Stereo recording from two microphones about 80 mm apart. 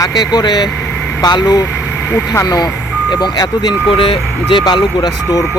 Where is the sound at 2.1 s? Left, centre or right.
Left.